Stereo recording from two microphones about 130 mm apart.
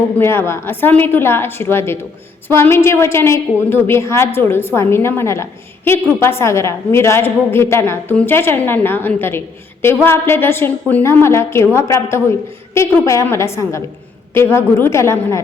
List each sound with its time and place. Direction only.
0.2 s a woman's voice: 20° left (ahead or behind)